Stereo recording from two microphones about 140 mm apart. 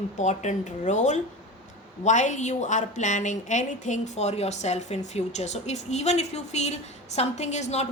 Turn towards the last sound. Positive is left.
turn(degrees=55)  # may be behind; listen again after turning